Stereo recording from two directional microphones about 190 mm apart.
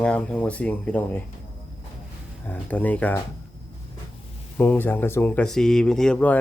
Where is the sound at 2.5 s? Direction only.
10° left (ahead or behind).